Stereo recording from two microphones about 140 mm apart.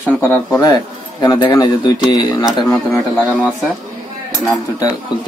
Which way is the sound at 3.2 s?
10° right (ahead or behind).